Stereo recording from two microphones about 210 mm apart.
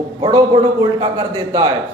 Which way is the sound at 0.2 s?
20° right (ahead or behind).